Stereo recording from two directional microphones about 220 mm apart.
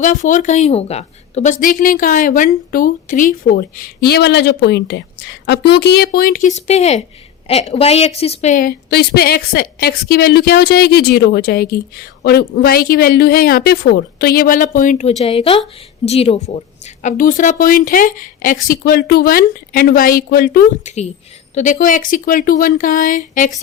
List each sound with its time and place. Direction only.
0.0 s a woman's voice: 35° left (ahead or behind)
15.2 s a woman's voice: 25° left (ahead or behind)